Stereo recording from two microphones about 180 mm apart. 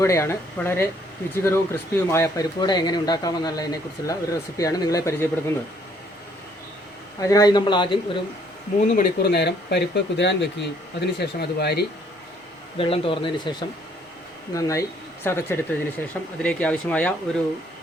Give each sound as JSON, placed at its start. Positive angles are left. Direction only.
{"t": 0.0, "sound": "speech", "side_deg": 15}
{"t": 7.2, "sound": "speech", "side_deg": 20}
{"t": 8.8, "sound": "speech", "side_deg": 45}
{"t": 12.7, "sound": "speech", "side_deg": 30}